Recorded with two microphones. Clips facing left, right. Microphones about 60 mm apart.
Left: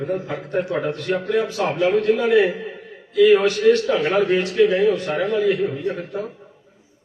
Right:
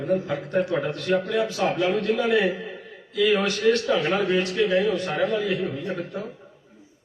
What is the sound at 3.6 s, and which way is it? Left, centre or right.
A man's voice, centre.